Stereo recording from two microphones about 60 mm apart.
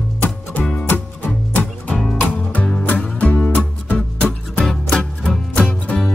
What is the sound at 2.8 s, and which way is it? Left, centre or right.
Music, centre.